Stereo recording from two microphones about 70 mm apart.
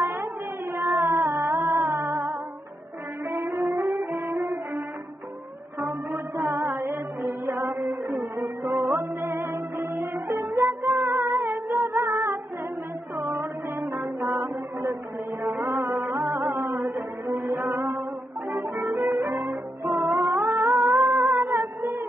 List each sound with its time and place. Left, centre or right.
0.0 s carnatic music: right
0.7 s a sound: right
1.7 s music: right
3.3 s music: right
11.0 s music: right
11.3 s music: right
12.0 s music: right
20.6 s music: right